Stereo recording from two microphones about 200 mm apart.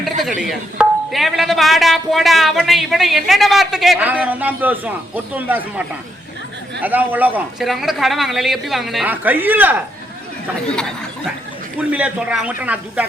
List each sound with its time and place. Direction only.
0.2 s speech: centre (ahead or behind)
6.8 s speech: 10° right (ahead or behind)
10.7 s speech: 5° left (ahead or behind)
11.8 s a man's voice: 5° right (ahead or behind)